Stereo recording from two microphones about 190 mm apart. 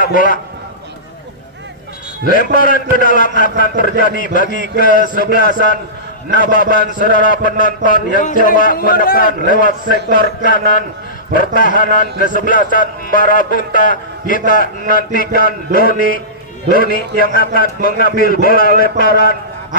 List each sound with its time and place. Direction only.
0.0 s a man's voice: 45° left (ahead or behind)
2.2 s a man's voice: 45° left (ahead or behind)